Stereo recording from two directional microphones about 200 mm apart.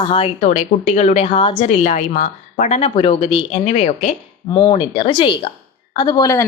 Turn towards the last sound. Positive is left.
turn(degrees=20)  # may be behind; listen again after turning